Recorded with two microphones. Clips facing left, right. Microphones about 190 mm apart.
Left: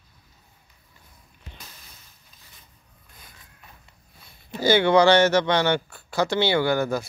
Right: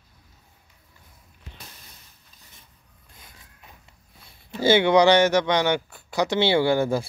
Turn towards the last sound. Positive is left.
turn(degrees=-30)  # may be behind; listen again after turning